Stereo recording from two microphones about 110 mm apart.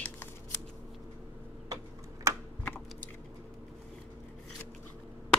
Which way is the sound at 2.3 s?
25° right (ahead or behind).